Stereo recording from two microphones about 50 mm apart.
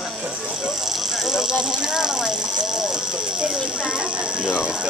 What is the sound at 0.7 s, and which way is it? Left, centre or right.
Speech, centre.